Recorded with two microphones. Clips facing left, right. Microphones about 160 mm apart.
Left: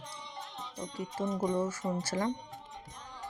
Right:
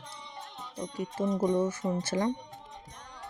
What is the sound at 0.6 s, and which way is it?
Music, 5° right (ahead or behind).